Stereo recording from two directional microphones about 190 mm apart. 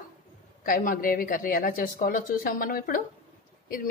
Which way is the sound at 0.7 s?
50° left (ahead or behind).